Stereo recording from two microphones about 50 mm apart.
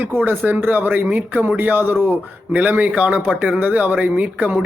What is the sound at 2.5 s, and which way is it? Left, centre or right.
Speech, right.